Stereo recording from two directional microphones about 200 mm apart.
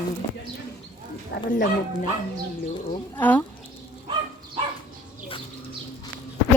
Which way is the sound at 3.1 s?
10° left (ahead or behind).